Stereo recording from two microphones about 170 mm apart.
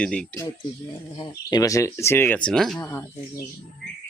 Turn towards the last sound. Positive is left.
turn(degrees=15)  # may be behind; listen again after turning